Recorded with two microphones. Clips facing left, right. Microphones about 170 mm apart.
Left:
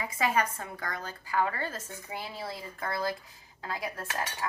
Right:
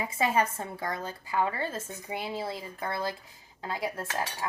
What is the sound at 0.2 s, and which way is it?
A woman's voice, 25° right (ahead or behind).